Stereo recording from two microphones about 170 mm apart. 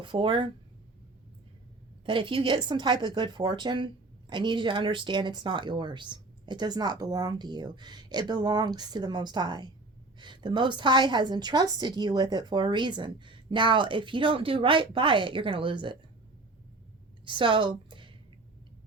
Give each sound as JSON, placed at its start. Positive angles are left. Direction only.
{"t": 0.0, "sound": "speech", "side_deg": -30}
{"t": 2.0, "sound": "speech", "side_deg": -30}
{"t": 17.2, "sound": "speech", "side_deg": -30}